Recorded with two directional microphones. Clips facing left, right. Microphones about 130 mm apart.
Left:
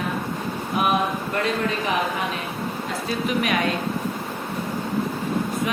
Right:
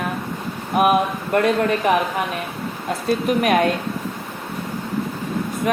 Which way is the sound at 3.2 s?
50° right (ahead or behind).